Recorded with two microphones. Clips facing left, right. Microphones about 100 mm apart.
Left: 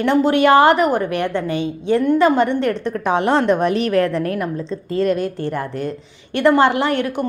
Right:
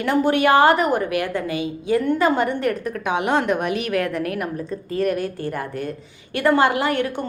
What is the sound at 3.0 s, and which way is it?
A woman's voice, 35° left (ahead or behind).